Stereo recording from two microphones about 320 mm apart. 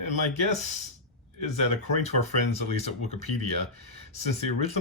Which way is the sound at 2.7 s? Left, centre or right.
Left.